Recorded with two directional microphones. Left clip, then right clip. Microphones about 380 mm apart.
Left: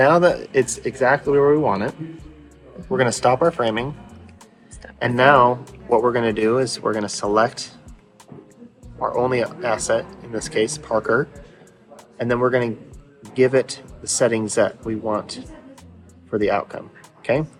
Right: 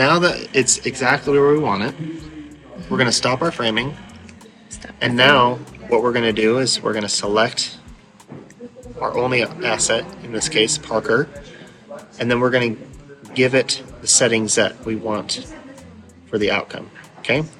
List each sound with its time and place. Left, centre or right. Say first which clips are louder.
0.0 s speech: left 1 dB; centre
4.9 s speech: even; centre
9.0 s speech: right 1 dB; centre
16.4 s speech: even; centre